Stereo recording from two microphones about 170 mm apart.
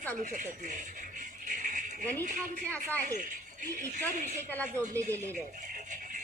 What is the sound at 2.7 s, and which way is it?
Speech, 10° left (ahead or behind).